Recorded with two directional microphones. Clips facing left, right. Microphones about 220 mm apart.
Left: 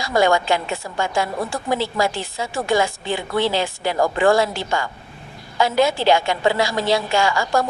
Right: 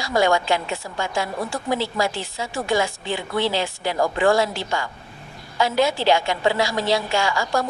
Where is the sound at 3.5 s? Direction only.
50° left (ahead or behind).